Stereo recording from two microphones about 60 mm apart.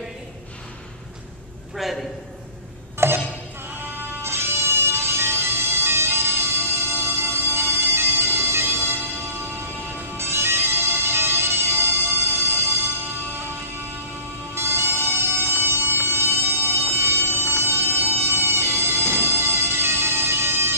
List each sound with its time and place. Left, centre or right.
1.8 s a man's voice: centre
3.0 s music: right
4.2 s music: right
10.1 s bagpipes: right
14.5 s music: right